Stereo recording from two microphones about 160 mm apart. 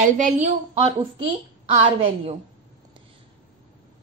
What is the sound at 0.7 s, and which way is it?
A woman's voice, 35° right (ahead or behind).